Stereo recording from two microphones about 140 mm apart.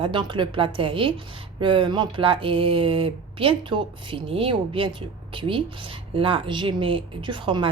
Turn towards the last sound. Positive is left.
turn(degrees=-35)  # may be behind; listen again after turning